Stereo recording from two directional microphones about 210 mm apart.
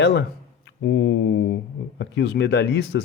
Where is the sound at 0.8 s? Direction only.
55° left (ahead or behind).